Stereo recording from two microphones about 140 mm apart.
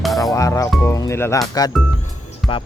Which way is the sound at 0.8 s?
20° left (ahead or behind).